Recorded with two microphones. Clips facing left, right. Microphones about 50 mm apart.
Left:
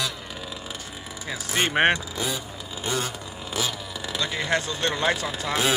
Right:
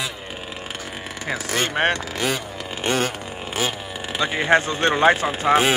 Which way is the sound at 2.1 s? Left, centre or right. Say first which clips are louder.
Right 5 dB; right.